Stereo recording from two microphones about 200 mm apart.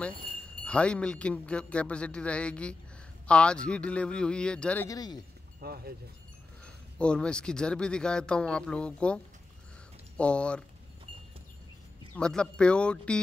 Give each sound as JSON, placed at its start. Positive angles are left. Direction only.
{"t": 0.7, "sound": "speech", "side_deg": 5}
{"t": 4.8, "sound": "speech", "side_deg": 20}
{"t": 5.6, "sound": "speech", "side_deg": -50}
{"t": 6.6, "sound": "speech", "side_deg": 5}
{"t": 12.2, "sound": "speech", "side_deg": 5}